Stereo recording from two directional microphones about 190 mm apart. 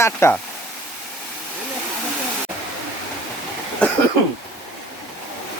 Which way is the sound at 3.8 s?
5° left (ahead or behind).